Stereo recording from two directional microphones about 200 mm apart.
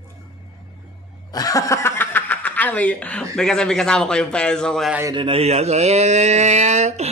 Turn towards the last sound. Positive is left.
turn(degrees=-35)  # may be behind; listen again after turning